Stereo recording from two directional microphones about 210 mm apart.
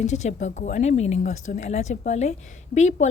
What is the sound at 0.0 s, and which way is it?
Speech, 35° left (ahead or behind).